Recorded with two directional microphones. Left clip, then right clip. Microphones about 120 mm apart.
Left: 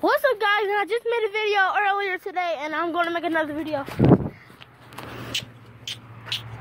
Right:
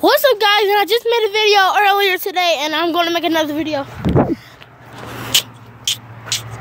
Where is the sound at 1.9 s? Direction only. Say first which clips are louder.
Right 10 dB; 35° right (ahead or behind).